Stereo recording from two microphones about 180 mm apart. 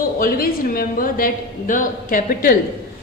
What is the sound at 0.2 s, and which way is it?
A woman's voice, 55° left (ahead or behind).